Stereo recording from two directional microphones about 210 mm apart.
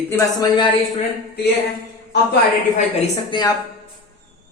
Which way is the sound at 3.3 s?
20° left (ahead or behind).